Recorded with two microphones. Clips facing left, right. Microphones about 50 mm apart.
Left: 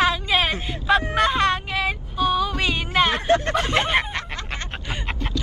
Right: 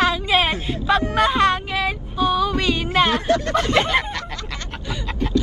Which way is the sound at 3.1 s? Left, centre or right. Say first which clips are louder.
Right 1 dB; left.